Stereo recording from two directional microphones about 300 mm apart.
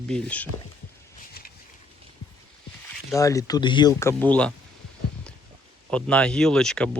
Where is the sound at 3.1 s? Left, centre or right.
Centre.